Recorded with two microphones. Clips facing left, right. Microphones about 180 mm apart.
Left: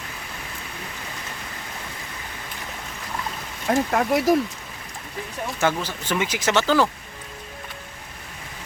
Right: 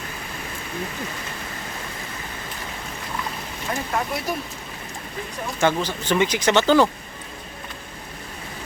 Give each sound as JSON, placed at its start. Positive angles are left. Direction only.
{"t": 3.7, "sound": "speech", "side_deg": 80}
{"t": 5.5, "sound": "speech", "side_deg": 5}